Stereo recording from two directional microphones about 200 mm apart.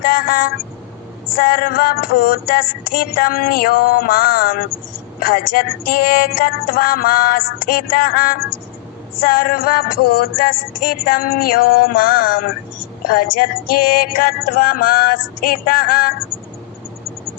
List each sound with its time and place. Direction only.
0.0 s music: 45° left (ahead or behind)